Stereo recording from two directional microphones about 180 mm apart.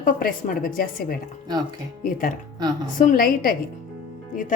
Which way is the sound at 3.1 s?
50° left (ahead or behind).